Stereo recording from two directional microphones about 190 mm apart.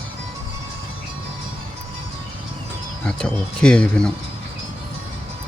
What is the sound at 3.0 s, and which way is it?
Speech, 5° left (ahead or behind).